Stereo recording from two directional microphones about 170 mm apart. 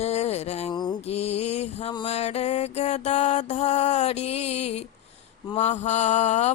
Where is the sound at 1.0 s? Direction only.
40° left (ahead or behind).